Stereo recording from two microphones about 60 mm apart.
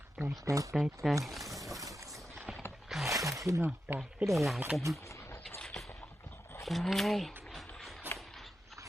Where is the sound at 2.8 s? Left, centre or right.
Centre.